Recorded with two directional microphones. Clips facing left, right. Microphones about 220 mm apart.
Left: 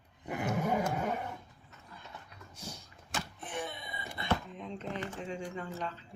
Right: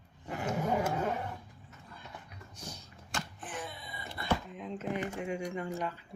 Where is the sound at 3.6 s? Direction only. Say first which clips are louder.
Left 2 dB; 20° left (ahead or behind).